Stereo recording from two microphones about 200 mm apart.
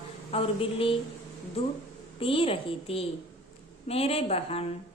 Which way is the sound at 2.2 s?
25° left (ahead or behind).